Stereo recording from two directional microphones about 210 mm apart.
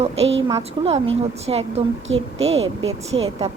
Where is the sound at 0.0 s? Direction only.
30° right (ahead or behind).